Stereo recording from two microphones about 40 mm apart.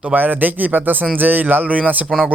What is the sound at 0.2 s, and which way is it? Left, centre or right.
Speech, right.